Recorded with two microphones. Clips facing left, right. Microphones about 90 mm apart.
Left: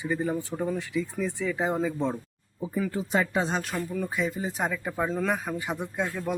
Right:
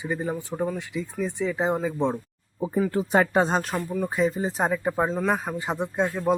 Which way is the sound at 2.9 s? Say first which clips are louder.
Right 5 dB; 55° right (ahead or behind).